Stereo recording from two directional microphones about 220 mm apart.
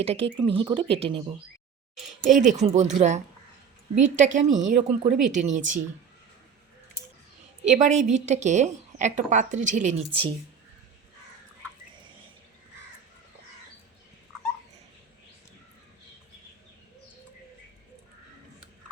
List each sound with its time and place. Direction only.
0.0 s speech: 25° right (ahead or behind)
2.4 s a woman's voice: 30° right (ahead or behind)
7.6 s a woman's voice: 35° right (ahead or behind)